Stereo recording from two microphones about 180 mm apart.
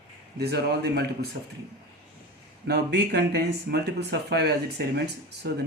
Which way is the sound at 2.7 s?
65° right (ahead or behind).